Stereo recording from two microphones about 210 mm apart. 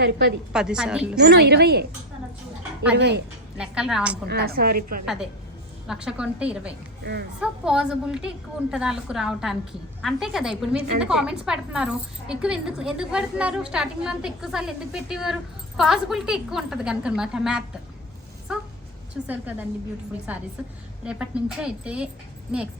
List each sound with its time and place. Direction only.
0.5 s a woman's voice: 5° right (ahead or behind)
1.2 s a woman's voice: 50° right (ahead or behind)
2.9 s a woman's voice: 55° right (ahead or behind)
3.6 s a woman's voice: 5° right (ahead or behind)
4.3 s a woman's voice: 50° right (ahead or behind)
5.9 s a woman's voice: 5° right (ahead or behind)
7.0 s speech: 50° right (ahead or behind)
7.3 s a woman's voice: 5° right (ahead or behind)
21.0 s a woman's voice: 5° right (ahead or behind)